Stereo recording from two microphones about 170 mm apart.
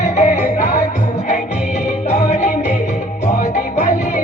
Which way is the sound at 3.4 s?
50° left (ahead or behind).